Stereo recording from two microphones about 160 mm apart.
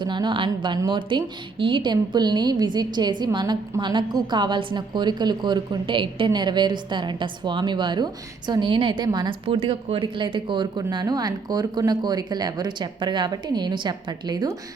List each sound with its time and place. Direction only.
0.0 s a woman's voice: 30° right (ahead or behind)